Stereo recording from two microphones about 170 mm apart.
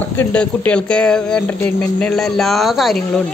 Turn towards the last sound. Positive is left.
turn(degrees=0)  # may be behind; listen again after turning